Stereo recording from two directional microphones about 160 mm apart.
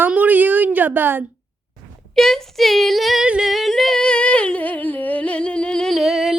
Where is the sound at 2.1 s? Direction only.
Centre (ahead or behind).